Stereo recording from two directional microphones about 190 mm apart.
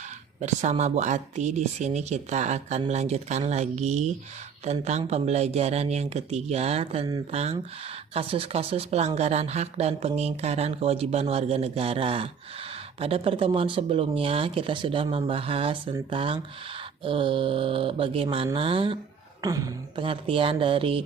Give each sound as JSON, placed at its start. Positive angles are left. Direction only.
{"t": 0.4, "sound": "speech", "side_deg": -35}
{"t": 19.4, "sound": "speech", "side_deg": -20}